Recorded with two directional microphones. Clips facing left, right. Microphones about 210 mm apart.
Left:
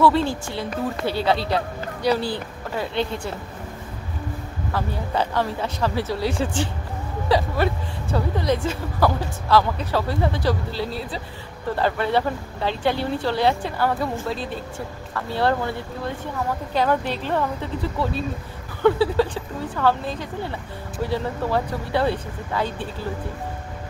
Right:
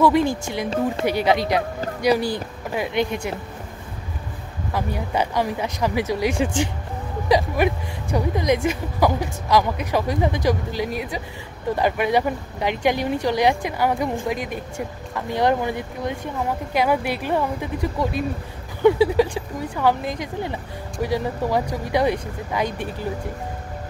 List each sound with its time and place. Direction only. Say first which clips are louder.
0.0 s speech: right 1 dB; 15° right (ahead or behind)
4.7 s speech: right 1 dB; 15° right (ahead or behind)